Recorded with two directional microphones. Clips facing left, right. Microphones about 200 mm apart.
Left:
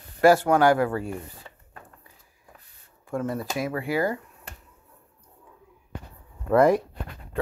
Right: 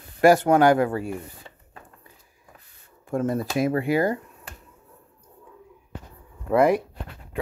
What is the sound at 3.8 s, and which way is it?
Speech, 20° right (ahead or behind).